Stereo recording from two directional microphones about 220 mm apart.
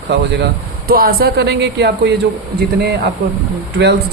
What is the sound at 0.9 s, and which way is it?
Speech, 40° right (ahead or behind).